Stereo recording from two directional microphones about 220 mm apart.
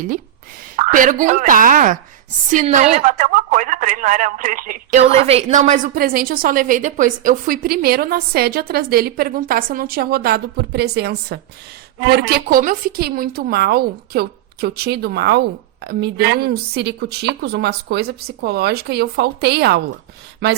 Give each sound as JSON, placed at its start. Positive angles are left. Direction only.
{"t": 0.8, "sound": "a woman's voice", "side_deg": -35}